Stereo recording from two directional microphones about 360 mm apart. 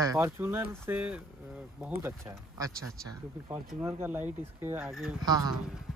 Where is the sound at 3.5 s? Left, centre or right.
Centre.